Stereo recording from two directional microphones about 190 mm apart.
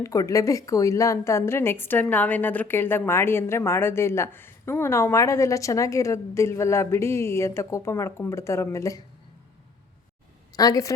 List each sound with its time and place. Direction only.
0.0 s a woman's voice: 15° left (ahead or behind)
10.5 s a woman's voice: 20° left (ahead or behind)